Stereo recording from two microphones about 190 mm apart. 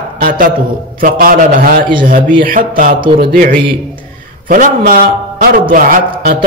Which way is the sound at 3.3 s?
45° right (ahead or behind).